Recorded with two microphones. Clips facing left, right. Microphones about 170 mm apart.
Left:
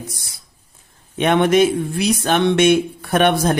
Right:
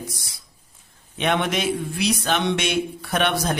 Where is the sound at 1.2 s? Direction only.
50° left (ahead or behind).